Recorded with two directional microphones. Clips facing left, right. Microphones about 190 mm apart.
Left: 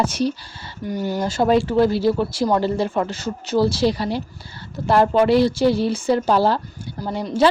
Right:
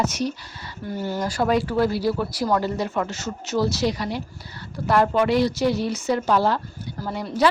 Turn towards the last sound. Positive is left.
turn(degrees=25)  # may be behind; listen again after turning